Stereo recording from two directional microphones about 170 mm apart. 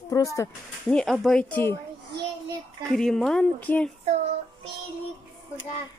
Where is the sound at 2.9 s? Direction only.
Centre (ahead or behind).